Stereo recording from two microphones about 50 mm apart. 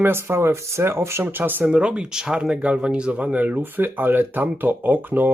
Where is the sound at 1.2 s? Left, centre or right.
Right.